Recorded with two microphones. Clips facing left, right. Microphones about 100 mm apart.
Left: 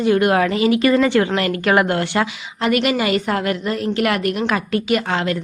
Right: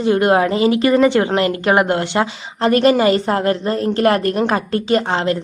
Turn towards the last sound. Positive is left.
turn(degrees=-30)  # may be behind; listen again after turning